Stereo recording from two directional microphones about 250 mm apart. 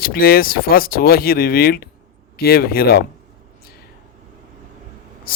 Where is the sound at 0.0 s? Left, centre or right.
Left.